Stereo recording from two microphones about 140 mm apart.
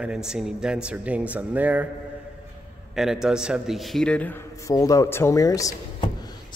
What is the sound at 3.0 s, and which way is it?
A man's voice, 5° right (ahead or behind).